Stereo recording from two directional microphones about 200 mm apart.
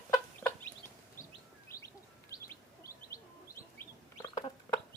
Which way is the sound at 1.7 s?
50° left (ahead or behind).